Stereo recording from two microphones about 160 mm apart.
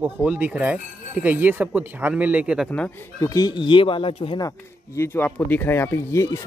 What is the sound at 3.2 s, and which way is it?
Speech, 25° left (ahead or behind).